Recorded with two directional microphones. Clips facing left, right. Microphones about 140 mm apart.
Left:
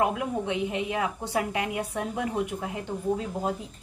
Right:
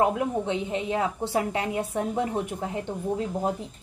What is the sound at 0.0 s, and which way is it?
Speech, 30° right (ahead or behind).